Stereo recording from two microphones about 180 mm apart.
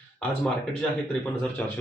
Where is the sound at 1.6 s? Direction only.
10° left (ahead or behind).